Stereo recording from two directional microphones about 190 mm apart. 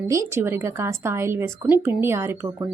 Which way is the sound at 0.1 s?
15° right (ahead or behind).